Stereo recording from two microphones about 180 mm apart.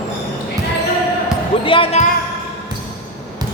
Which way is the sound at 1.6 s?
30° left (ahead or behind).